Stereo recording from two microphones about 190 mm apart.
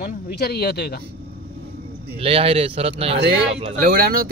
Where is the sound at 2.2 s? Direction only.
30° right (ahead or behind).